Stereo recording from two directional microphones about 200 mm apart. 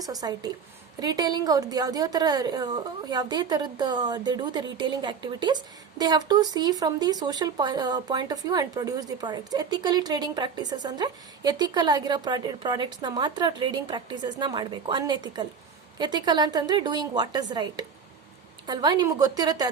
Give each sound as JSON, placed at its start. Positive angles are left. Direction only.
{"t": 0.0, "sound": "a woman's voice", "side_deg": -20}